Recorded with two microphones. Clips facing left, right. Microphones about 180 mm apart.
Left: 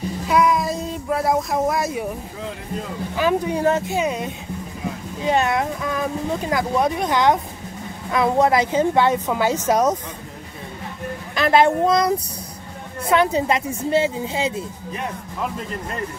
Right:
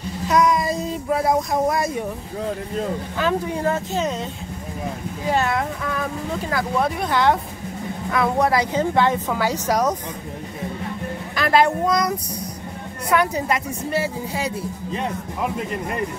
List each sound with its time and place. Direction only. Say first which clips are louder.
0.3 s child singing: even; 5° left (ahead or behind)
3.2 s a woman's voice: left 4 dB; 15° left (ahead or behind)
11.3 s a woman's voice: left 2 dB; 20° left (ahead or behind)
13.1 s a woman's voice: left 2 dB; 25° left (ahead or behind)